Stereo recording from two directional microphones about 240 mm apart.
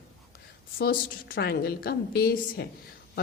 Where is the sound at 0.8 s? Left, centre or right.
Left.